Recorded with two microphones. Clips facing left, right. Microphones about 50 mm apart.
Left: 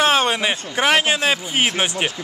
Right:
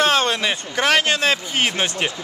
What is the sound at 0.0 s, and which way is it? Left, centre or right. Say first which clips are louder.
Speech: left 1 dB; centre.